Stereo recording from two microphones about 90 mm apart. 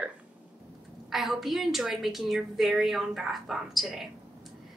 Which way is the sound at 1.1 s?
Centre (ahead or behind).